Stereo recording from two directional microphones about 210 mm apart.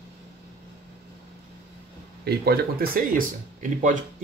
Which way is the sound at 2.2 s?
50° right (ahead or behind).